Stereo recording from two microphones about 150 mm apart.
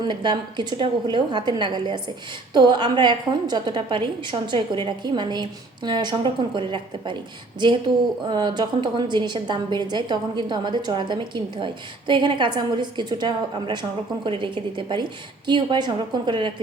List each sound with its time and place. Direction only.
0.0 s a woman's voice: 30° right (ahead or behind)
8.3 s a woman's voice: 30° right (ahead or behind)